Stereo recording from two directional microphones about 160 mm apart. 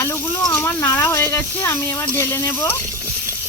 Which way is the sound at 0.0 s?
15° left (ahead or behind).